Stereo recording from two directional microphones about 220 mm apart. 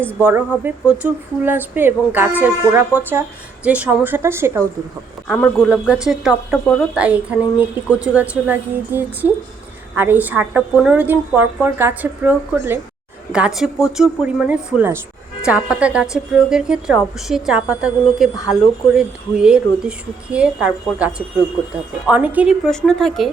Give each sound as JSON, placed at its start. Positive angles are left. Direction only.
{"t": 0.2, "sound": "speech", "side_deg": -10}
{"t": 5.3, "sound": "a woman's voice", "side_deg": 0}